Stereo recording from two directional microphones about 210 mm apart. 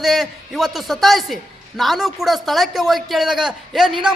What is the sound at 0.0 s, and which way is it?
A woman's voice, centre (ahead or behind).